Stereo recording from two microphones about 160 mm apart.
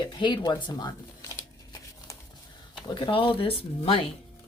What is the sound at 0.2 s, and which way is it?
Speech, 30° left (ahead or behind).